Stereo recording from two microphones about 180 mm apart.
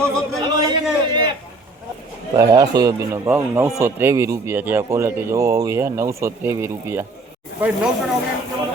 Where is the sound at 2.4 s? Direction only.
20° right (ahead or behind).